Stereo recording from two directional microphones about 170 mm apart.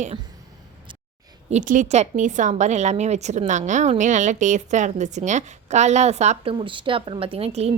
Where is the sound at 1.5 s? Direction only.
45° right (ahead or behind).